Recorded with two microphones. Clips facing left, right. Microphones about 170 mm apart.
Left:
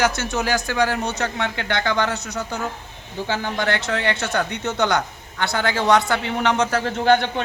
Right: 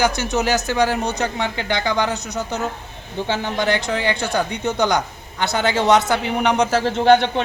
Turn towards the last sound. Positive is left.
turn(degrees=-25)  # may be behind; listen again after turning